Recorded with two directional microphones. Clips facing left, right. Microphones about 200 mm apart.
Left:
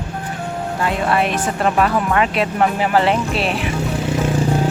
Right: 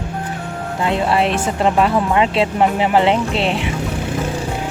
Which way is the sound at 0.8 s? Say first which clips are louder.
Right 2 dB; 25° right (ahead or behind).